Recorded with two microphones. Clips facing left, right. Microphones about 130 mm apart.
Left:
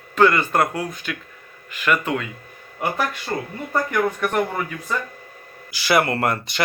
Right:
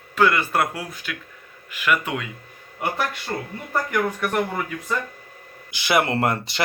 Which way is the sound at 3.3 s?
15° left (ahead or behind).